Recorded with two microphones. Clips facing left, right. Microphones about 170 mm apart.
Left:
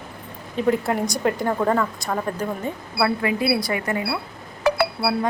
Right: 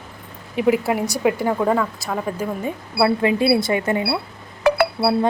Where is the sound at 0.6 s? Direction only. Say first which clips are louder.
Right 2 dB; 10° right (ahead or behind).